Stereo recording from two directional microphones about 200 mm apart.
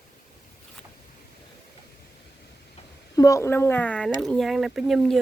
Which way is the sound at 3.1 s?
15° left (ahead or behind).